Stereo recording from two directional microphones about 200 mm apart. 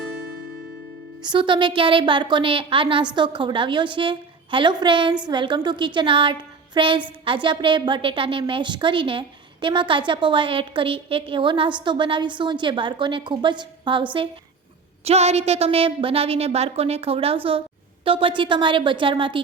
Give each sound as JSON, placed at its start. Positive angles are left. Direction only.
{"t": 1.2, "sound": "a woman's voice", "side_deg": -25}